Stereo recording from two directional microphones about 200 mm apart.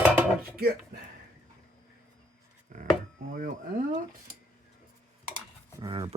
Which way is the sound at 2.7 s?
40° right (ahead or behind).